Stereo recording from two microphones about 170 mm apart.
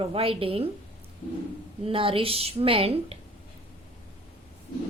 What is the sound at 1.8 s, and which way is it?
A woman's voice, 30° right (ahead or behind).